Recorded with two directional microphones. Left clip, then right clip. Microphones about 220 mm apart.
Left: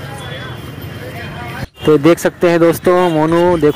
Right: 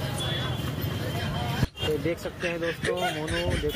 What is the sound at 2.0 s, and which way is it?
Speech, 40° left (ahead or behind).